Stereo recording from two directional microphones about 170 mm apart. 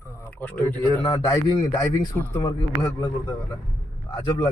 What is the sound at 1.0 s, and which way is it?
A man's voice, 25° left (ahead or behind).